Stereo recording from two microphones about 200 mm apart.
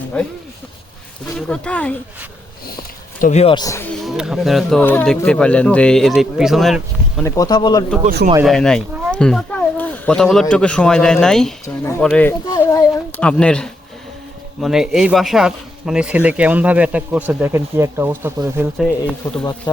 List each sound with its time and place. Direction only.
0.1 s speech: 5° left (ahead or behind)
1.4 s speech: 5° left (ahead or behind)
2.6 s a sound: 45° left (ahead or behind)
3.4 s speech: 20° left (ahead or behind)
4.0 s speech: centre (ahead or behind)
7.3 s speech: 15° left (ahead or behind)
8.4 s speech: 5° left (ahead or behind)
11.6 s speech: 15° left (ahead or behind)
12.5 s a sound: 10° left (ahead or behind)
14.6 s speech: centre (ahead or behind)
18.8 s speech: 5° left (ahead or behind)
19.7 s speech: 20° left (ahead or behind)